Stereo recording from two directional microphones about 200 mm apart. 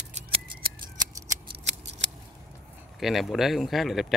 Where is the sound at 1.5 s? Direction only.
60° right (ahead or behind).